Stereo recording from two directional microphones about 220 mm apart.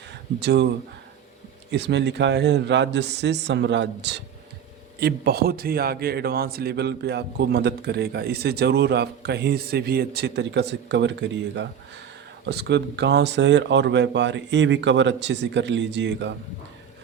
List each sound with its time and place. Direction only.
0.1 s speech: 50° right (ahead or behind)
1.7 s a man's voice: 50° right (ahead or behind)